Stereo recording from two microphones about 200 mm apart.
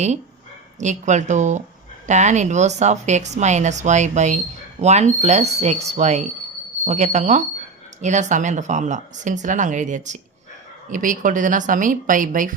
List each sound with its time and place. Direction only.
0.8 s a woman's voice: 35° right (ahead or behind)